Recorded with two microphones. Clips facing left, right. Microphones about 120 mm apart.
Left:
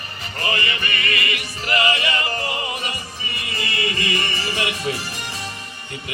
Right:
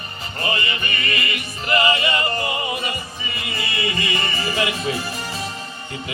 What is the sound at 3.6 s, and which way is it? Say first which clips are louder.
Music: even; 30° right (ahead or behind).